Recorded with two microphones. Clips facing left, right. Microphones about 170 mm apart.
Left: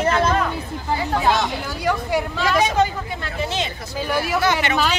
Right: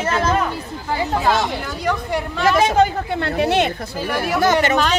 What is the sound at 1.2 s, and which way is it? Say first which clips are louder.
Speech: right 1 dB; centre (ahead or behind).